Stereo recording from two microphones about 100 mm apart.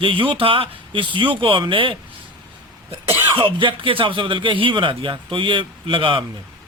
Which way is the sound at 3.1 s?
55° right (ahead or behind).